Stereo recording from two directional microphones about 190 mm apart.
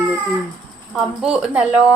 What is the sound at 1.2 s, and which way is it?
Speech, 5° right (ahead or behind).